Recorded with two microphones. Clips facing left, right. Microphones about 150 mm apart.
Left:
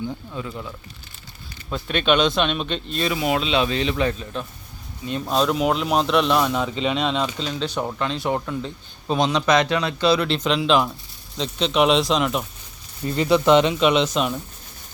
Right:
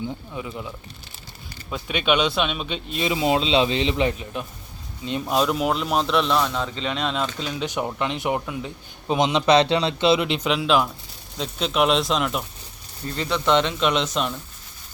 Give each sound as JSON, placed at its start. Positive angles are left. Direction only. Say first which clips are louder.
{"t": 0.0, "sound": "speech", "louder": "left 1 dB", "side_deg": -15}
{"t": 1.7, "sound": "speech", "louder": "left 2 dB", "side_deg": -10}
{"t": 3.1, "sound": "speech", "louder": "right 2 dB", "side_deg": -25}
{"t": 5.2, "sound": "a man's voice", "louder": "left 2 dB", "side_deg": -5}
{"t": 7.3, "sound": "a man's voice", "louder": "left 1 dB", "side_deg": -10}
{"t": 13.1, "sound": "a man's voice", "louder": "left 5 dB", "side_deg": 10}